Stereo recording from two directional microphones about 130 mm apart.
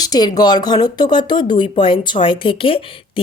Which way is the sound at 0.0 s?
30° left (ahead or behind).